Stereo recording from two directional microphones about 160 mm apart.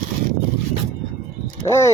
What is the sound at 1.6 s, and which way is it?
Speech, 20° left (ahead or behind).